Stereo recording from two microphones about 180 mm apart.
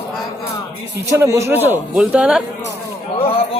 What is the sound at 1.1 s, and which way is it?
A man's voice, 15° right (ahead or behind).